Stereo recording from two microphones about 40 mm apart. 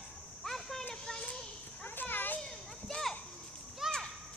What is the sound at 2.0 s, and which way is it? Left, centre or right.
Children playing, left.